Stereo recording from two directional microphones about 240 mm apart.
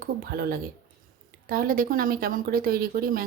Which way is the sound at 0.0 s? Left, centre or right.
Right.